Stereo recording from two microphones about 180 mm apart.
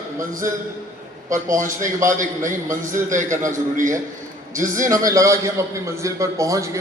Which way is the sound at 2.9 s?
45° right (ahead or behind).